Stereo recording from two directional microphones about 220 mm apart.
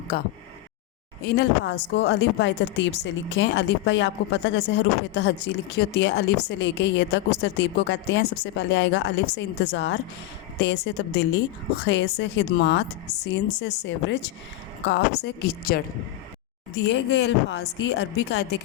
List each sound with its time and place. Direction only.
0.1 s speech: 45° left (ahead or behind)
16.9 s speech: 50° left (ahead or behind)